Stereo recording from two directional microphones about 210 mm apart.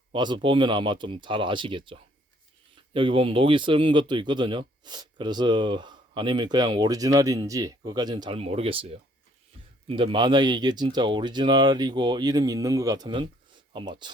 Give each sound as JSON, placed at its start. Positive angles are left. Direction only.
{"t": 0.1, "sound": "speech", "side_deg": -20}